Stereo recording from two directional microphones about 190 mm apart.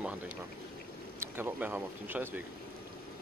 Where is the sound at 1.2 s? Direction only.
10° right (ahead or behind).